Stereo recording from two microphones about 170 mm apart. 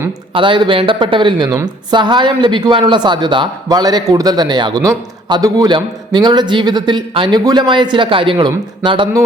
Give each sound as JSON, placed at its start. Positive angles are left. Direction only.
{"t": 0.3, "sound": "speech", "side_deg": -30}